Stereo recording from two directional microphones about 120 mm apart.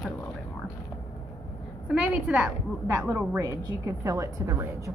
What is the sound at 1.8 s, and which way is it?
A woman's voice, 10° right (ahead or behind).